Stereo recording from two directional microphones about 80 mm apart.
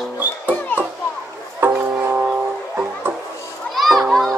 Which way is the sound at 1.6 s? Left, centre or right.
Right.